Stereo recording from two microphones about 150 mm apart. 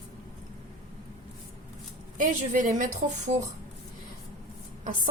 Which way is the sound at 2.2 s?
60° right (ahead or behind).